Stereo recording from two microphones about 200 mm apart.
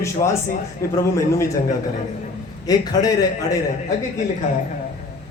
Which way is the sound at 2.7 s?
20° left (ahead or behind).